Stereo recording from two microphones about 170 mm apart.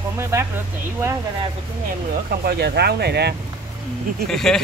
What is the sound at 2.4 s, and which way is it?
Speech, 75° right (ahead or behind).